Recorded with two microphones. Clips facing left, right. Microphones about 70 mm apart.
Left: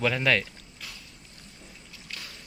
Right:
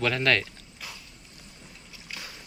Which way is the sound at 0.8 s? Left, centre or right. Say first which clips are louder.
Right 2 dB; centre.